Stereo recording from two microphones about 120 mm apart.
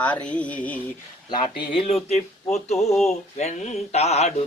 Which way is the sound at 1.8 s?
60° left (ahead or behind).